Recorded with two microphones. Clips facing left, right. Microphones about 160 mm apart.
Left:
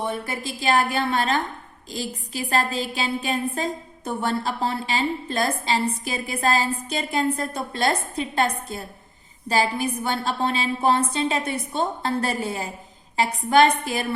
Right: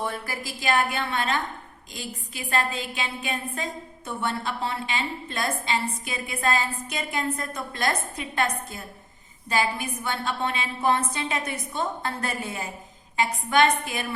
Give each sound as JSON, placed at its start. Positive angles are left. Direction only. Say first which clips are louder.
{"t": 0.0, "sound": "a woman's voice", "louder": "left 3 dB", "side_deg": 20}